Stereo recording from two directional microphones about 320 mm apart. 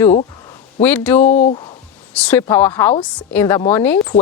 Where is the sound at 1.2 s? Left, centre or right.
Left.